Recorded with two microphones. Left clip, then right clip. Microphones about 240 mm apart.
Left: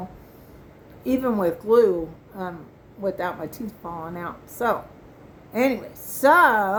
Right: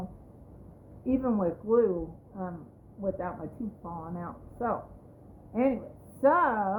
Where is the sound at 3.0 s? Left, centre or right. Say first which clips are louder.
Left 7 dB; centre.